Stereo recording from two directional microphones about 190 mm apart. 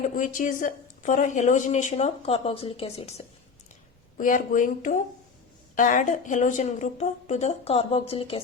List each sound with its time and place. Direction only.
0.1 s a woman's voice: 45° left (ahead or behind)
4.2 s a woman's voice: 45° left (ahead or behind)